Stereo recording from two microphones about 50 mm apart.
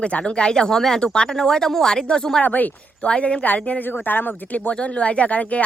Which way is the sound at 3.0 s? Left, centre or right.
Centre.